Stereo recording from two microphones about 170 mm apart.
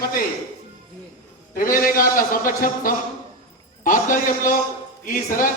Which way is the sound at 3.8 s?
50° left (ahead or behind).